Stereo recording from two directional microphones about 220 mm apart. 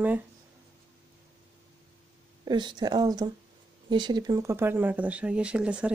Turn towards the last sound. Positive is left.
turn(degrees=-5)  # may be behind; listen again after turning